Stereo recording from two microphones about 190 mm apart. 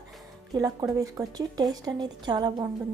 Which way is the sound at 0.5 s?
20° right (ahead or behind).